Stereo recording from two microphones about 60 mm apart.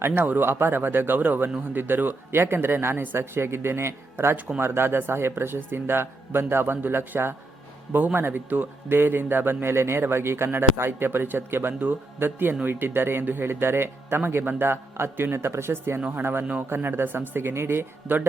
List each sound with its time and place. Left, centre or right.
0.0 s a man's voice: right
4.4 s speech: right
4.6 s a man's voice: right
16.0 s speech: right
16.2 s a man's voice: right